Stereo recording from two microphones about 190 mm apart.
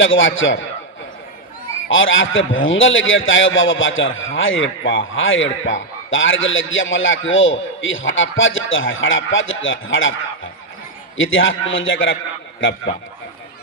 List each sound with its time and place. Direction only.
0.0 s a man's voice: 90° left
1.9 s a man's voice: 90° left
11.2 s a man's voice: 90° left